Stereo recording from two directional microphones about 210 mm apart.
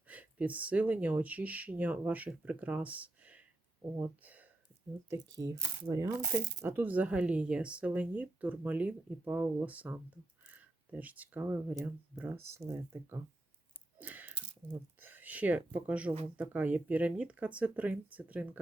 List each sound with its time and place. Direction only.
0.1 s speech: 5° right (ahead or behind)
14.0 s a sound: 10° right (ahead or behind)
15.0 s speech: 10° right (ahead or behind)